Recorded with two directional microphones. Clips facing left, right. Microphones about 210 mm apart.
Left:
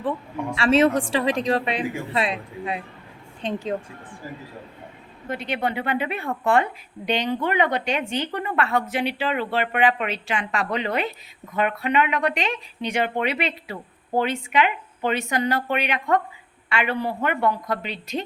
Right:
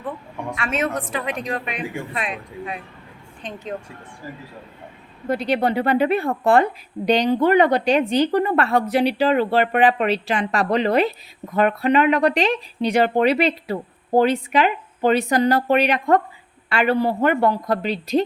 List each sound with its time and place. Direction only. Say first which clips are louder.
0.5 s speech: left 7 dB; 30° left (ahead or behind)
5.3 s speech: right 6 dB; 35° right (ahead or behind)